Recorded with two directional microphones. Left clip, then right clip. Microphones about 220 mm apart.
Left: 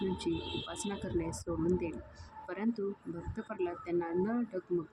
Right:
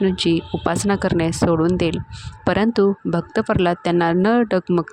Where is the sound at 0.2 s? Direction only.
45° right (ahead or behind).